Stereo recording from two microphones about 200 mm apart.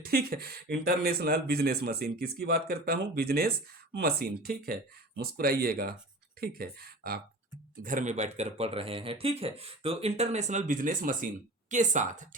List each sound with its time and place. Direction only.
0.0 s speech: 50° right (ahead or behind)
7.9 s speech: 40° right (ahead or behind)